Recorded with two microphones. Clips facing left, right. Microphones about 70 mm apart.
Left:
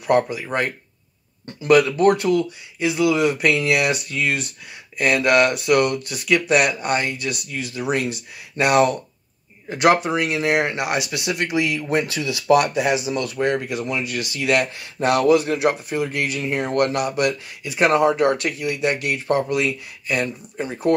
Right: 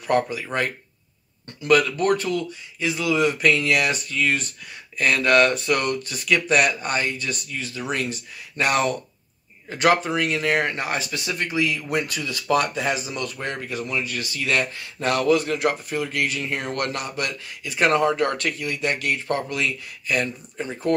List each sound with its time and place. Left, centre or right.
0.3 s speech: centre
1.6 s speech: left
11.1 s speech: left
12.2 s speech: centre
13.2 s speech: centre
16.3 s speech: left
16.9 s speech: centre